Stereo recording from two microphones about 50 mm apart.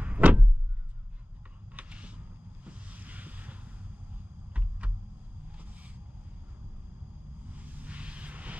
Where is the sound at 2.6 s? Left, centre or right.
Right.